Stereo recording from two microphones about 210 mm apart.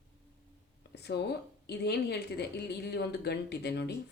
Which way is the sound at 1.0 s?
50° left (ahead or behind).